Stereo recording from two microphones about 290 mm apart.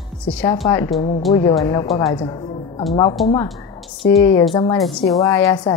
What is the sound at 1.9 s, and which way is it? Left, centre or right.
Speech, centre.